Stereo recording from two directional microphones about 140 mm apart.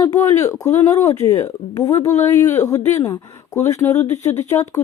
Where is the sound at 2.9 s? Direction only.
20° left (ahead or behind).